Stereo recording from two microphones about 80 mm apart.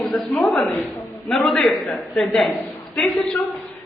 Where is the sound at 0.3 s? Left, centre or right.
Left.